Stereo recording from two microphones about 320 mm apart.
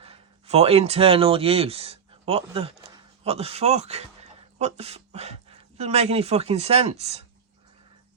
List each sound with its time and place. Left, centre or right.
0.0 s speech: centre